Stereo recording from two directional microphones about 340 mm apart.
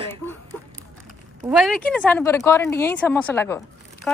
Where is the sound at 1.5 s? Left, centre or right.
Centre.